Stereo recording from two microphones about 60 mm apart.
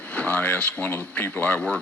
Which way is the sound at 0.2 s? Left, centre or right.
Centre.